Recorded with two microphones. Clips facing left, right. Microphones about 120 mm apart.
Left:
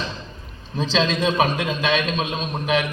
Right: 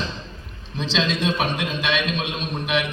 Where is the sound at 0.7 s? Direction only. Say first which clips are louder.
Left 3 dB; 45° left (ahead or behind).